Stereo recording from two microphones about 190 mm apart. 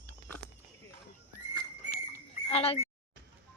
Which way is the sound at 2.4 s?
30° left (ahead or behind).